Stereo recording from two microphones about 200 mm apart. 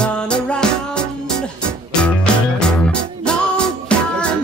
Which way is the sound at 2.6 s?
5° left (ahead or behind).